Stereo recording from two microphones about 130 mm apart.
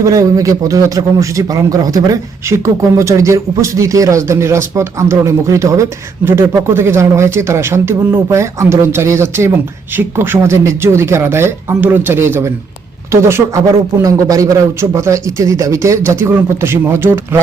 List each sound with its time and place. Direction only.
0.0 s a man's voice: 25° right (ahead or behind)